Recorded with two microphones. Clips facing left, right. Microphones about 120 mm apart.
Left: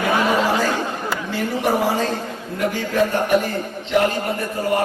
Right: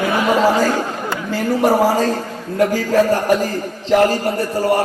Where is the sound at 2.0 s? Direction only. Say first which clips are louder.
Right 4 dB; 40° right (ahead or behind).